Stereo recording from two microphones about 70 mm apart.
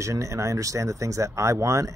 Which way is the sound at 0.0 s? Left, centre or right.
Right.